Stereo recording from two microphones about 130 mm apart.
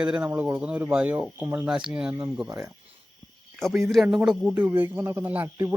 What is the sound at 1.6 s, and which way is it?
Speech, 5° right (ahead or behind).